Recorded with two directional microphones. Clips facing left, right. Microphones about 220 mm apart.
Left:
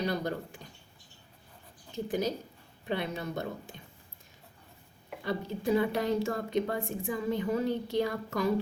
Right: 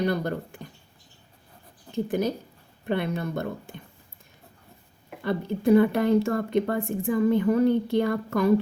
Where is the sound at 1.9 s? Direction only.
55° right (ahead or behind).